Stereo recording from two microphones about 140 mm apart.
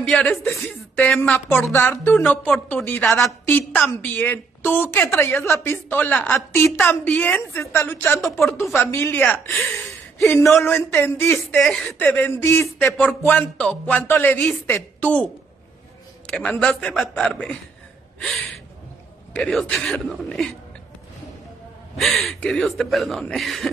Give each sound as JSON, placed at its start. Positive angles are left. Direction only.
{"t": 0.0, "sound": "a woman's voice", "side_deg": 5}
{"t": 11.3, "sound": "speech", "side_deg": 0}
{"t": 12.0, "sound": "a woman's voice", "side_deg": 15}
{"t": 12.8, "sound": "a woman's voice", "side_deg": 5}
{"t": 16.3, "sound": "speech", "side_deg": 5}
{"t": 19.3, "sound": "speech", "side_deg": 10}
{"t": 21.9, "sound": "speech", "side_deg": 0}